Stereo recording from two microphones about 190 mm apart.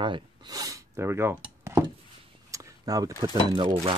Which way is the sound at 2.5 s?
20° right (ahead or behind).